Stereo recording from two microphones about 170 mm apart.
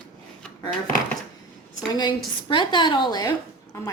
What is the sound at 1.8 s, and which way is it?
A woman's voice, 25° left (ahead or behind).